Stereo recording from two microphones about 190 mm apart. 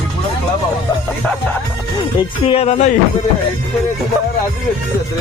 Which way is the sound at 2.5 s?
35° left (ahead or behind).